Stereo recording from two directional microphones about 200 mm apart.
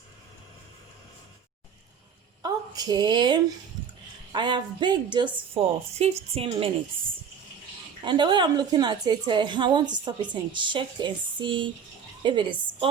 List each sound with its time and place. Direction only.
2.4 s a woman's voice: 20° right (ahead or behind)
8.0 s a woman's voice: 25° right (ahead or behind)